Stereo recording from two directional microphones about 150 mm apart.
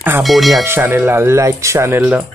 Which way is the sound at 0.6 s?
15° right (ahead or behind).